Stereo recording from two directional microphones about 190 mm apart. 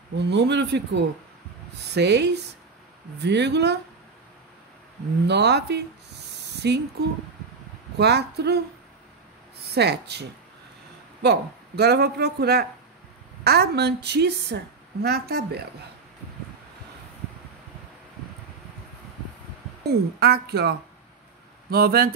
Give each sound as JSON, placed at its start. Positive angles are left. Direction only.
{"t": 0.3, "sound": "a woman's voice", "side_deg": -65}
{"t": 5.2, "sound": "a woman's voice", "side_deg": -60}
{"t": 6.3, "sound": "a sound", "side_deg": -60}
{"t": 8.0, "sound": "a woman's voice", "side_deg": -60}
{"t": 9.8, "sound": "a woman's voice", "side_deg": -60}
{"t": 11.2, "sound": "a woman's voice", "side_deg": -60}
{"t": 19.8, "sound": "a woman's voice", "side_deg": -55}